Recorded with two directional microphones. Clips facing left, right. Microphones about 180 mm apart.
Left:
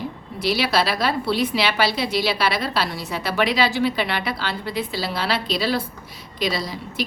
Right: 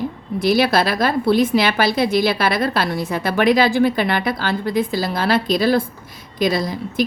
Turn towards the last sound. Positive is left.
turn(degrees=-50)  # may be behind; listen again after turning